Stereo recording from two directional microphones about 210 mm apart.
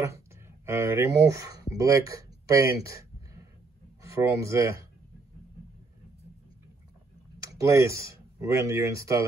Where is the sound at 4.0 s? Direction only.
15° right (ahead or behind).